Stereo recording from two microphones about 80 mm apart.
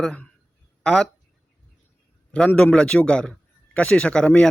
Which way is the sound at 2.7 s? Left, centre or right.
Centre.